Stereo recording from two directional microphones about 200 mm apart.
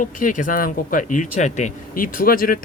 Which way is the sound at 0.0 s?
40° left (ahead or behind).